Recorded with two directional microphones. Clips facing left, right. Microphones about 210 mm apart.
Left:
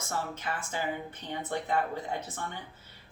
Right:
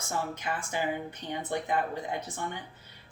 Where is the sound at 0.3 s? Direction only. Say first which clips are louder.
Right 2 dB; 15° right (ahead or behind).